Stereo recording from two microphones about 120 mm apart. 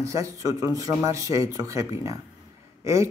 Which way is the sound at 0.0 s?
25° right (ahead or behind).